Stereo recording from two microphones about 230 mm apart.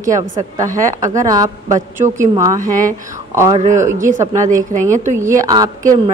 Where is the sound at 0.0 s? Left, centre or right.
Centre.